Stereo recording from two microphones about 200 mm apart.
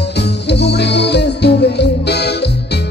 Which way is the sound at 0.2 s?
60° left (ahead or behind).